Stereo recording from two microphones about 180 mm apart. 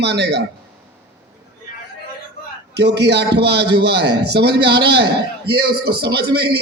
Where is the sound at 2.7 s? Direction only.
70° right (ahead or behind).